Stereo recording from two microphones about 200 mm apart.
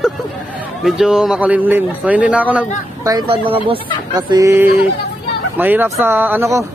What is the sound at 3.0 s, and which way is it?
Speech, 20° right (ahead or behind).